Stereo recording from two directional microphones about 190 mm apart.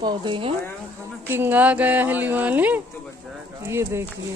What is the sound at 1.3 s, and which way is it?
Speech, 10° right (ahead or behind).